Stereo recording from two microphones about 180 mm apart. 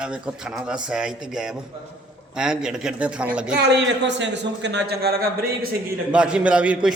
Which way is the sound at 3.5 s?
70° right (ahead or behind).